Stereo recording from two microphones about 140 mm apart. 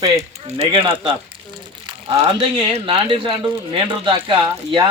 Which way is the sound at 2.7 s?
40° right (ahead or behind).